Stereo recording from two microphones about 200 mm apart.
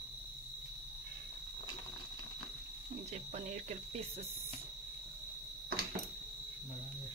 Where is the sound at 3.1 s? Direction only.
35° right (ahead or behind).